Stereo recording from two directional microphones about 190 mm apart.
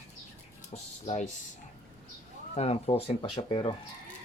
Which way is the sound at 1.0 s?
40° left (ahead or behind).